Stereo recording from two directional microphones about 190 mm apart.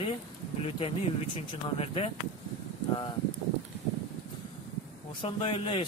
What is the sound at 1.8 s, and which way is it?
Speech, 30° left (ahead or behind).